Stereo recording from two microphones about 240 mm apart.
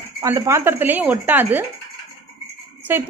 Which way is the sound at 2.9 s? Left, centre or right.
Centre.